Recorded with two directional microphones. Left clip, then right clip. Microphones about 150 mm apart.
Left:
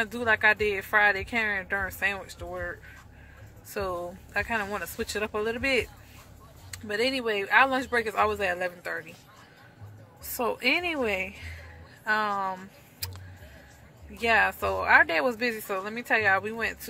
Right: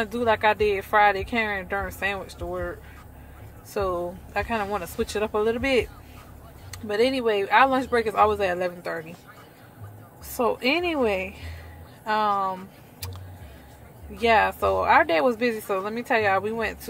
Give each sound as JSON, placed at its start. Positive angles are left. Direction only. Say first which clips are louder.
{"t": 0.0, "sound": "speech", "louder": "right 2 dB", "side_deg": -15}
{"t": 3.7, "sound": "speech", "louder": "right 5 dB", "side_deg": -15}
{"t": 10.3, "sound": "speech", "louder": "right 3 dB", "side_deg": -15}
{"t": 14.1, "sound": "speech", "louder": "right 3 dB", "side_deg": -15}